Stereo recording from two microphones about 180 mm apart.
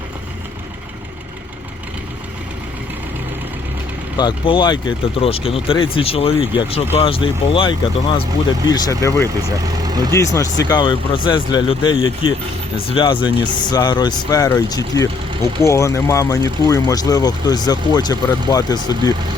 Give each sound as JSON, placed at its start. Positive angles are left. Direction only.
{"t": 4.2, "sound": "speech", "side_deg": 25}
{"t": 8.7, "sound": "speech", "side_deg": 20}
{"t": 9.8, "sound": "vehicle", "side_deg": -20}
{"t": 10.1, "sound": "speech", "side_deg": 15}